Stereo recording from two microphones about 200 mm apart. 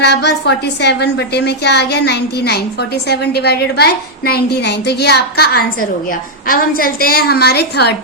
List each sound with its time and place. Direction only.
0.0 s a woman's voice: 55° left (ahead or behind)